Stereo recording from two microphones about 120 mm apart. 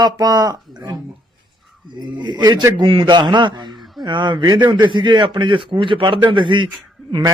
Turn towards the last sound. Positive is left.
turn(degrees=-40)  # may be behind; listen again after turning